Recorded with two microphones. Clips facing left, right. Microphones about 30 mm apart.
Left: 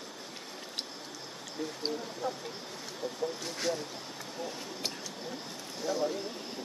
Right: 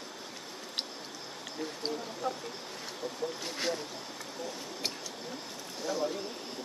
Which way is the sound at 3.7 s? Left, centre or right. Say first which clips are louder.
Left 2 dB; centre.